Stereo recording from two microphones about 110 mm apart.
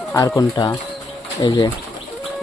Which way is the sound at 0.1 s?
35° left (ahead or behind).